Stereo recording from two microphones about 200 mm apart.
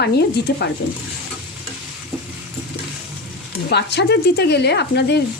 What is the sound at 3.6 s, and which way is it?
Speech, 55° left (ahead or behind).